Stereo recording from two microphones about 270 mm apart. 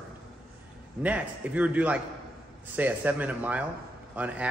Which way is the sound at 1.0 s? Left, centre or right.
Centre.